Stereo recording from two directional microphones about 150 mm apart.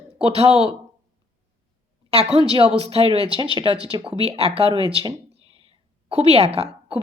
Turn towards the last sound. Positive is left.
turn(degrees=-40)  # may be behind; listen again after turning